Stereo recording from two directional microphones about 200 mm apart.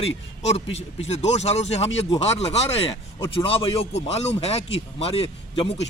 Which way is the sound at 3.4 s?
25° left (ahead or behind).